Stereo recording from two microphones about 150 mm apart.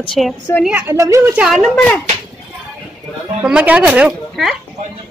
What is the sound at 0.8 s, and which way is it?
Speech, 20° right (ahead or behind).